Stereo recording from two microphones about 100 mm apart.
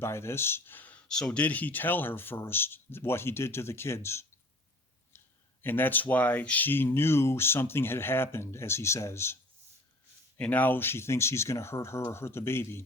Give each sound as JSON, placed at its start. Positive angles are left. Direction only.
{"t": 0.0, "sound": "speech", "side_deg": 25}
{"t": 5.6, "sound": "speech", "side_deg": 20}
{"t": 10.3, "sound": "speech", "side_deg": 15}